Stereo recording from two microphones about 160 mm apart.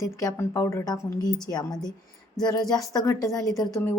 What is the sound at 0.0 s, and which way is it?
A woman's voice, 20° left (ahead or behind).